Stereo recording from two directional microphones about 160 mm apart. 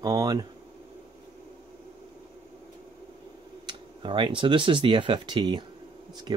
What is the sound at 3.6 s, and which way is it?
Speech, 30° right (ahead or behind).